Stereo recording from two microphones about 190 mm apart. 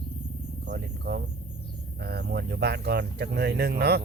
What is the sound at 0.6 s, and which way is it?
Speech, 55° right (ahead or behind).